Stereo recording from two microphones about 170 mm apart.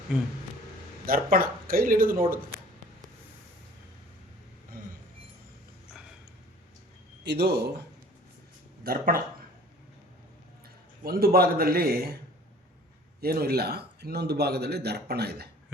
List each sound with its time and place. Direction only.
1.0 s speech: 60° right (ahead or behind)
4.7 s a sound: 55° right (ahead or behind)
7.3 s a man's voice: 70° right (ahead or behind)
8.8 s speech: 60° right (ahead or behind)
11.0 s speech: 60° right (ahead or behind)
13.2 s a man's voice: 65° right (ahead or behind)